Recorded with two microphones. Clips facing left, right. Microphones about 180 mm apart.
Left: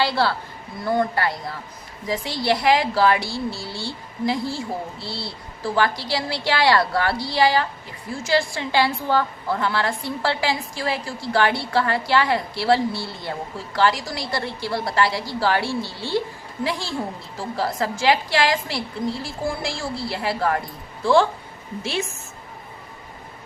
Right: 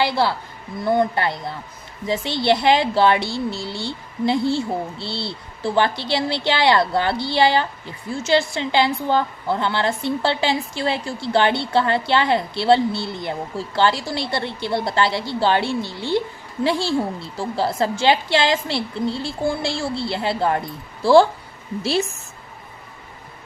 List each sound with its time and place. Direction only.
0.0 s a woman's voice: 15° right (ahead or behind)
16.6 s a woman's voice: 30° right (ahead or behind)